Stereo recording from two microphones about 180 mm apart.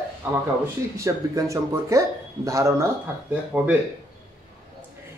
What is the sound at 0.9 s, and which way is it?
Speech, 15° right (ahead or behind).